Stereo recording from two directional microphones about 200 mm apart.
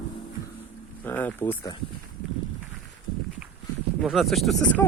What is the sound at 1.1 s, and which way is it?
Speech, 10° left (ahead or behind).